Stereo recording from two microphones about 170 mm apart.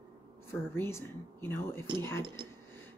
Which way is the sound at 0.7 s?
15° left (ahead or behind).